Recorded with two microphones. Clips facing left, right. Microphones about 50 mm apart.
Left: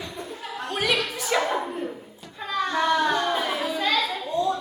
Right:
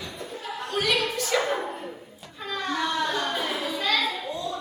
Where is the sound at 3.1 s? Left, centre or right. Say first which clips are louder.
Left 4 dB; left.